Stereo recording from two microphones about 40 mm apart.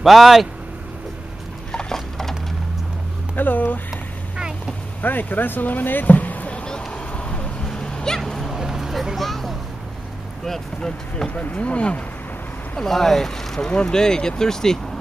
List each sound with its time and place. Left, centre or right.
0.0 s speech: centre
1.7 s horse: left
3.3 s speech: left
5.0 s speech: left
6.5 s vehicle: left
7.1 s a sound: left
7.6 s vehicle: centre
8.3 s a sound: centre
8.5 s a sound: centre
9.2 s a sound: centre
10.4 s speech: centre
11.2 s speech: left
12.7 s speech: centre
13.7 s speech: left